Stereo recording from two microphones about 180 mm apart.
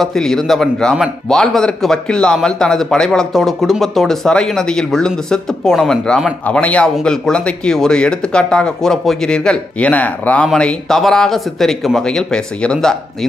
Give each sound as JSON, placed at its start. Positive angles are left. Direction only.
{"t": 0.0, "sound": "a man's voice", "side_deg": 0}